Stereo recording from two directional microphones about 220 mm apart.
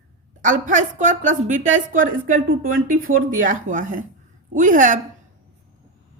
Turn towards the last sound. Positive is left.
turn(degrees=-35)  # may be behind; listen again after turning